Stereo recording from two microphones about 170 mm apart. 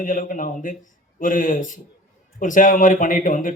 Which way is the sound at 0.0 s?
50° left (ahead or behind).